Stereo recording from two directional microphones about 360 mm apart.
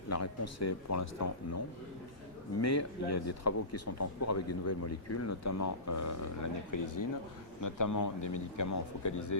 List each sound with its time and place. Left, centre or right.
0.1 s speech: left
2.6 s speech: left